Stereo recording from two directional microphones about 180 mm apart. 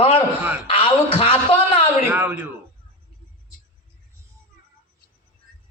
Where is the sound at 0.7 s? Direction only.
30° left (ahead or behind).